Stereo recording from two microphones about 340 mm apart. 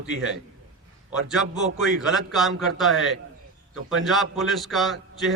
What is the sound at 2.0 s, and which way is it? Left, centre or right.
A man's voice, centre.